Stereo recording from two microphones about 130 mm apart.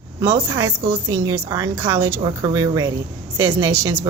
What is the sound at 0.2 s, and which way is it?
A woman's voice, 20° right (ahead or behind).